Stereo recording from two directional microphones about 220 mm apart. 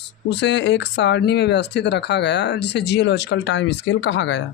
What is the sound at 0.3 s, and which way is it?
Speech, 55° left (ahead or behind).